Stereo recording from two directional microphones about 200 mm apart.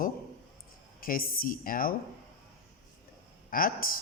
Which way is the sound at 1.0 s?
45° left (ahead or behind).